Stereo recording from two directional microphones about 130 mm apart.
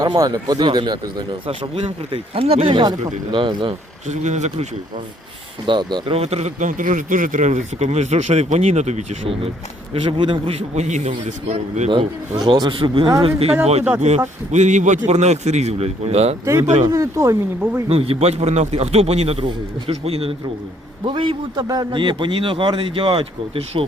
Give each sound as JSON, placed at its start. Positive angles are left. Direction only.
{"t": 0.0, "sound": "a man's voice", "side_deg": -30}
{"t": 1.5, "sound": "a man's voice", "side_deg": -50}
{"t": 4.1, "sound": "speech", "side_deg": -65}
{"t": 5.6, "sound": "a man's voice", "side_deg": -35}
{"t": 6.1, "sound": "speech", "side_deg": -55}
{"t": 9.2, "sound": "a man's voice", "side_deg": -45}
{"t": 12.4, "sound": "a man's voice", "side_deg": -35}
{"t": 14.1, "sound": "speech", "side_deg": -60}
{"t": 16.8, "sound": "speech", "side_deg": -25}
{"t": 17.8, "sound": "a man's voice", "side_deg": -50}
{"t": 21.0, "sound": "a man's voice", "side_deg": -40}